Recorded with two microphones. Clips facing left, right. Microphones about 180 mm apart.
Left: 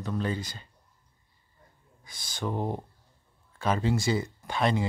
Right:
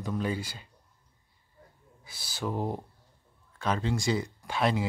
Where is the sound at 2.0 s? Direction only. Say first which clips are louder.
Left 1 dB; 5° right (ahead or behind).